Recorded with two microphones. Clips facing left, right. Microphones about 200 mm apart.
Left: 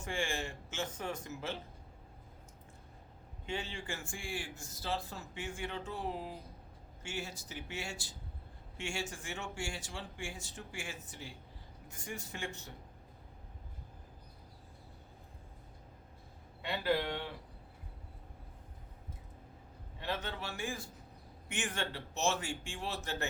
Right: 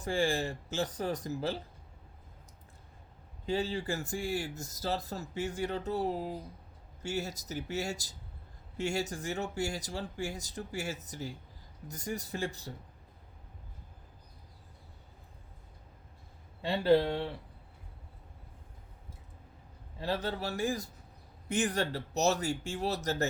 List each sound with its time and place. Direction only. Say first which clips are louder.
0.0 s speech: right 7 dB; 35° right (ahead or behind)
3.4 s speech: right 8 dB; 35° right (ahead or behind)
16.6 s speech: right 8 dB; 30° right (ahead or behind)
20.0 s speech: right 6 dB; 35° right (ahead or behind)